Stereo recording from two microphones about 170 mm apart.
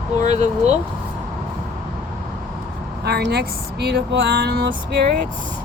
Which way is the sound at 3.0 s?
75° right (ahead or behind).